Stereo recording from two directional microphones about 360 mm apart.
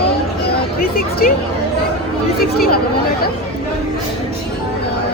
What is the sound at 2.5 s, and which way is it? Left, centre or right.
Speech, left.